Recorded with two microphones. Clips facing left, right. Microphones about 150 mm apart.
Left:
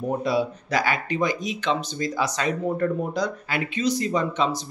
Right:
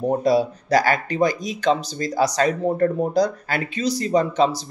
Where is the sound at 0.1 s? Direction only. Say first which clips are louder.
Right 4 dB; 40° right (ahead or behind).